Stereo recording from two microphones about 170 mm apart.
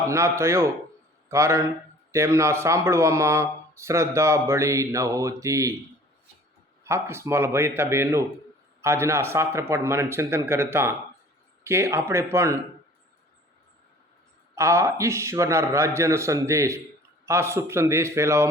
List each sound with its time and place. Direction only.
0.0 s speech: 15° right (ahead or behind)
6.8 s speech: 15° right (ahead or behind)
14.5 s speech: 15° right (ahead or behind)